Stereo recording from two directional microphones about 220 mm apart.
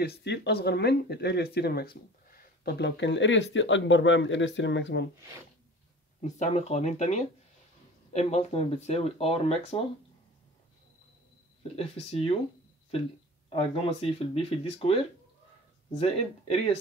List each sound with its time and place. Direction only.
0.0 s speech: 50° left (ahead or behind)
6.2 s speech: 30° left (ahead or behind)
11.7 s speech: 25° left (ahead or behind)
13.5 s speech: 25° left (ahead or behind)
16.0 s speech: 30° left (ahead or behind)